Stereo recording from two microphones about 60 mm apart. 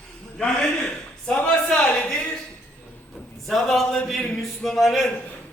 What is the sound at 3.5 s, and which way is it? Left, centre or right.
A man's voice, centre.